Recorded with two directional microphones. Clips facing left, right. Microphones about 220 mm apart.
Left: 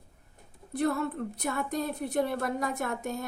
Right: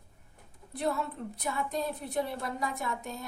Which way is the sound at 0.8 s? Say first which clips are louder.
Left 4 dB; 60° left (ahead or behind).